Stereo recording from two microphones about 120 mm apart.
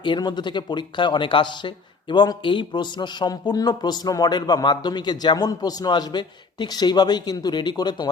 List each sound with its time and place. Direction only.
0.0 s speech: 40° left (ahead or behind)